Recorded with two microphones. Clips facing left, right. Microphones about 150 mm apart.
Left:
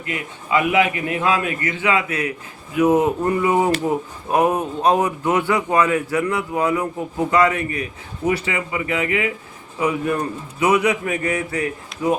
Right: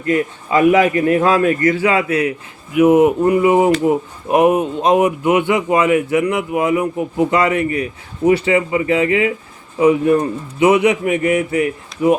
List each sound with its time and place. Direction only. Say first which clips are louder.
0.0 s a man's voice: right 12 dB; 40° right (ahead or behind)
2.7 s speech: right 5 dB; 15° right (ahead or behind)